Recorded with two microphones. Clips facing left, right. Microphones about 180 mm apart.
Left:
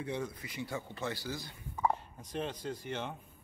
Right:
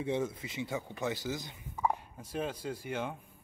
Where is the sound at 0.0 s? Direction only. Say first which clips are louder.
Right 5 dB; 25° right (ahead or behind).